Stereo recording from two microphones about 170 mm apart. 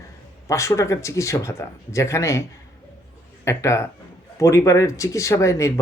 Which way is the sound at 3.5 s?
15° left (ahead or behind).